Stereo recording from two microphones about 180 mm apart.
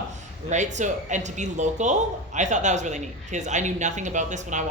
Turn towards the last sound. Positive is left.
turn(degrees=-40)  # may be behind; listen again after turning